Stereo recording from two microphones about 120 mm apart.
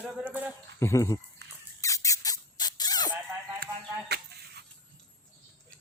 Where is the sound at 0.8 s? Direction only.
25° left (ahead or behind).